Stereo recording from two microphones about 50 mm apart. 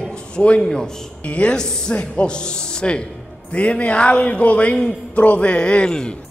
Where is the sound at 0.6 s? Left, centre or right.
Centre.